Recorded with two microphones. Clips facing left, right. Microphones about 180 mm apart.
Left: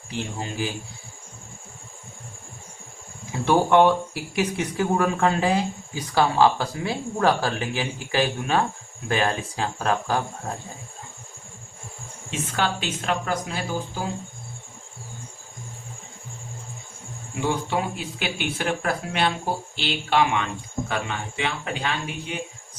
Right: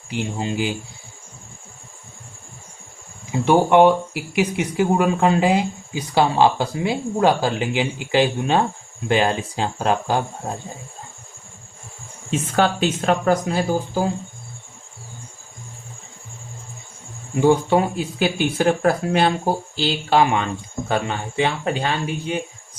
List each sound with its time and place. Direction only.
0.1 s speech: 20° right (ahead or behind)
3.3 s speech: 15° right (ahead or behind)
12.5 s speech: 45° right (ahead or behind)
17.4 s speech: 45° right (ahead or behind)